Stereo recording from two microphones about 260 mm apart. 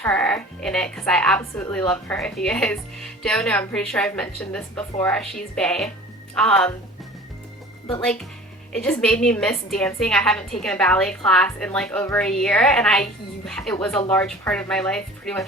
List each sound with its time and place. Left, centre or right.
0.0 s a woman's voice: centre
8.0 s a woman's voice: centre